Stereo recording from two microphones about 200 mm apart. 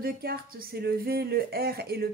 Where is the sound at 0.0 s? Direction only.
50° right (ahead or behind).